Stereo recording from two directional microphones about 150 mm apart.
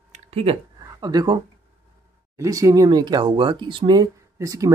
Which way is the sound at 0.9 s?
25° right (ahead or behind).